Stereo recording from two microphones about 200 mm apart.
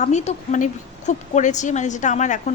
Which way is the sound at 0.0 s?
35° left (ahead or behind).